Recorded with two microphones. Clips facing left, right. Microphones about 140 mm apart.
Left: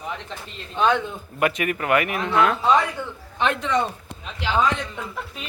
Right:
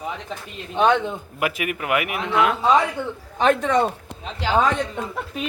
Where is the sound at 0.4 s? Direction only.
15° right (ahead or behind).